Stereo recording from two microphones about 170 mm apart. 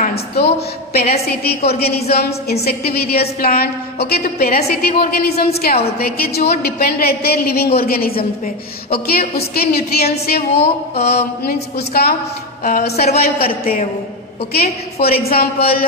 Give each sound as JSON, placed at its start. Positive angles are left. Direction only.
{"t": 1.1, "sound": "a woman's voice", "side_deg": 65}
{"t": 12.6, "sound": "a woman's voice", "side_deg": 55}
{"t": 14.5, "sound": "a woman's voice", "side_deg": 65}